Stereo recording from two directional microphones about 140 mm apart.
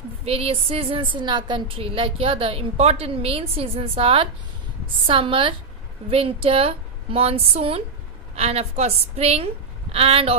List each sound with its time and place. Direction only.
0.2 s a woman's voice: 40° right (ahead or behind)